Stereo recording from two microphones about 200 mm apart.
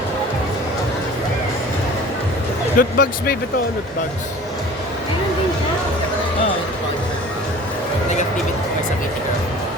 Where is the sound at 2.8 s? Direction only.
45° left (ahead or behind).